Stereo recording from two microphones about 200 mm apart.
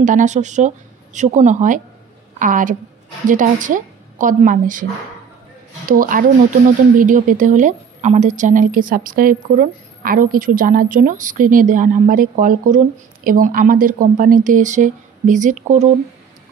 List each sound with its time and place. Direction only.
0.0 s a woman's voice: 40° right (ahead or behind)
5.9 s a woman's voice: 45° right (ahead or behind)